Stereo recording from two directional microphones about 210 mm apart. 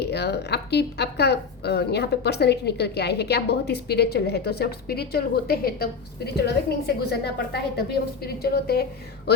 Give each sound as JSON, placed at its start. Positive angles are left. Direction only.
{"t": 0.0, "sound": "a woman's voice", "side_deg": 50}